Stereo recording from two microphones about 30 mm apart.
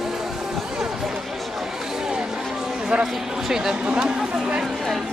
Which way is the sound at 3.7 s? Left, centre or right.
Right.